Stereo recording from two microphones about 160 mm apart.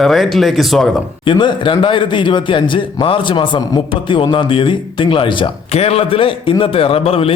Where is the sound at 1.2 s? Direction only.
30° left (ahead or behind).